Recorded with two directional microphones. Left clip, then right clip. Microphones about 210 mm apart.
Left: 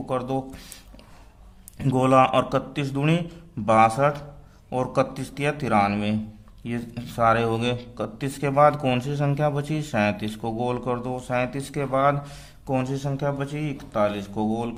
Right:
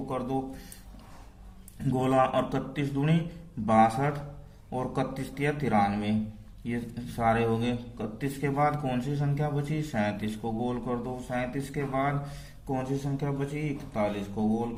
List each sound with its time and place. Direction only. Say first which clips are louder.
1.8 s a man's voice: left 7 dB; 45° left (ahead or behind)